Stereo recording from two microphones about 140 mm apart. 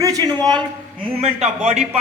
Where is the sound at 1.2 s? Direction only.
50° right (ahead or behind).